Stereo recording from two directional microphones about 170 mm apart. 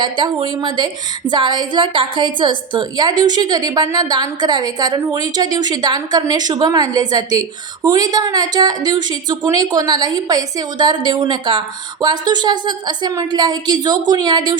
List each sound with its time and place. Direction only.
0.0 s a woman's voice: 25° right (ahead or behind)